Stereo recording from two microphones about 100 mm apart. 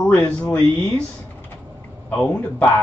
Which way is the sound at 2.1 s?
10° left (ahead or behind).